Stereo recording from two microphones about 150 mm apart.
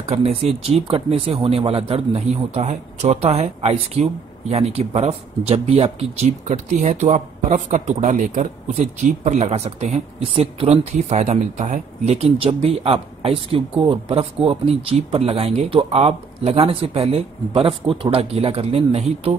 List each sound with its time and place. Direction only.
0.0 s speech: 40° right (ahead or behind)